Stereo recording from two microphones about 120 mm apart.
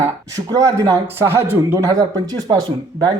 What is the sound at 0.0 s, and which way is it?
Speech, 30° right (ahead or behind).